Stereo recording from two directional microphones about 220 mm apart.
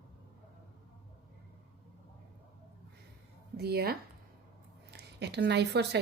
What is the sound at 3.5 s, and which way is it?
Speech, 45° right (ahead or behind).